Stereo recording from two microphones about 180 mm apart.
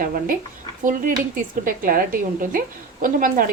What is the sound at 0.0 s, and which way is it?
Speech, 50° right (ahead or behind).